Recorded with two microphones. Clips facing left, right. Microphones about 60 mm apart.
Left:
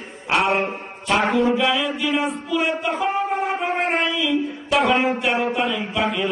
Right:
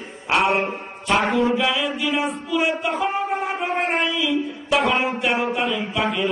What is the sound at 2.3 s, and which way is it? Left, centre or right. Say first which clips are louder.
Speech: even; centre.